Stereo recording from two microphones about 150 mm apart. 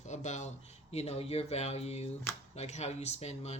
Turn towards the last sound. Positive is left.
turn(degrees=45)  # may be behind; listen again after turning